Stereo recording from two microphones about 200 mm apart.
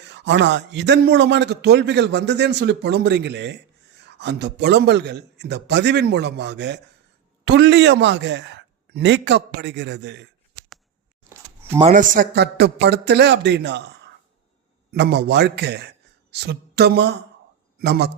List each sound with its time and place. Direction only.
0.1 s a man's voice: 60° right (ahead or behind)
11.2 s a sound: 10° right (ahead or behind)
11.8 s a man's voice: 35° right (ahead or behind); by 18.1 s 55° right (ahead or behind)